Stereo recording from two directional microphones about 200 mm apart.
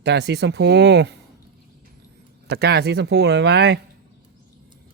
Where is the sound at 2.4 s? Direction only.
55° right (ahead or behind).